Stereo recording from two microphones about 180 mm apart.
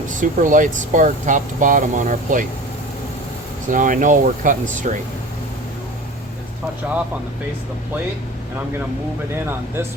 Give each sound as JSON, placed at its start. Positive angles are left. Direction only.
{"t": 0.2, "sound": "speech", "side_deg": -45}
{"t": 3.7, "sound": "speech", "side_deg": -45}